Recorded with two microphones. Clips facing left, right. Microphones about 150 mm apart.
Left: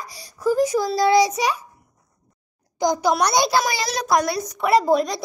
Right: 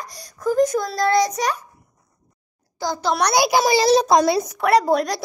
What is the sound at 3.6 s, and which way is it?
Child singing, 30° right (ahead or behind).